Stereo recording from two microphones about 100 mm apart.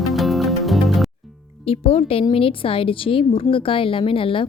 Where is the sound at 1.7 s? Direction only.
80° left.